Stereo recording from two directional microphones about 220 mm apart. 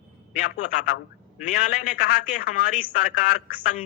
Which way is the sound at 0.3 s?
35° left (ahead or behind).